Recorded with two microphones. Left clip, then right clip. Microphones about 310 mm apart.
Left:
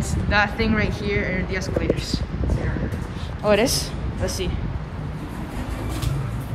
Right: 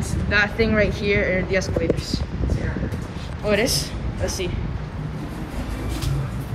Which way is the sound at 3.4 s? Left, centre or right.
Centre.